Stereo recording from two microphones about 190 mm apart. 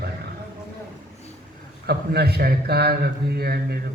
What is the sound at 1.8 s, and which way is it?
A man's voice, 55° right (ahead or behind).